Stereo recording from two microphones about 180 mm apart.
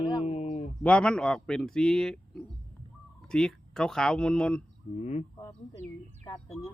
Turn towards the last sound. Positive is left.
turn(degrees=40)  # may be behind; listen again after turning